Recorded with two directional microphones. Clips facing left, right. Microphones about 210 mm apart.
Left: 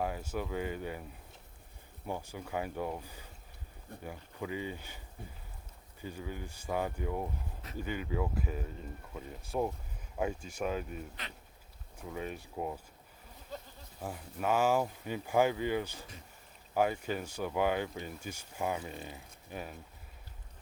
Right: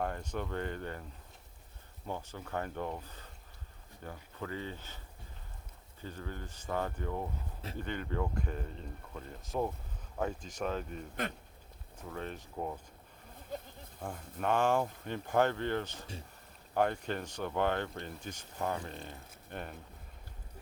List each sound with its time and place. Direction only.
0.0 s speech: 5° left (ahead or behind)
2.0 s speech: 10° left (ahead or behind)
6.0 s speech: 10° left (ahead or behind)
14.0 s speech: 5° left (ahead or behind)